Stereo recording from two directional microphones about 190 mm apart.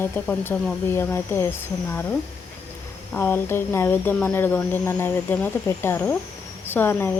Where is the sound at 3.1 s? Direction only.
10° left (ahead or behind).